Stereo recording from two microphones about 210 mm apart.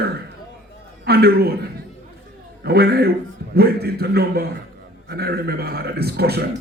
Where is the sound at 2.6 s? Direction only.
50° right (ahead or behind).